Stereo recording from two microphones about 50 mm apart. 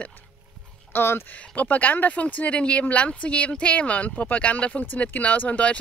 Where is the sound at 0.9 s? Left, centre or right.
Left.